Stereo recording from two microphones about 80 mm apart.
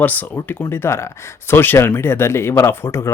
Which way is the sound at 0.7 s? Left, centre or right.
Left.